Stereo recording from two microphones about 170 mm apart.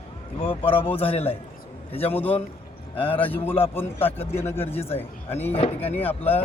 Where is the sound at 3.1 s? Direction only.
10° left (ahead or behind).